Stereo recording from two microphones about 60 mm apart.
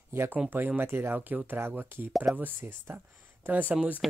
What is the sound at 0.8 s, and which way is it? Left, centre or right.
Speech, right.